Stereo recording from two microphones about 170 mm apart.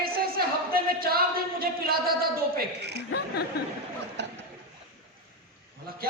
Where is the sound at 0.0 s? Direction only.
60° right (ahead or behind).